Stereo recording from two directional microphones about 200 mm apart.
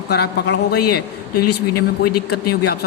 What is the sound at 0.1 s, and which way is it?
Speech, 55° left (ahead or behind).